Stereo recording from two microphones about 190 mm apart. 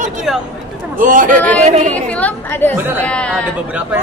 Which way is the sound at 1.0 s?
45° right (ahead or behind).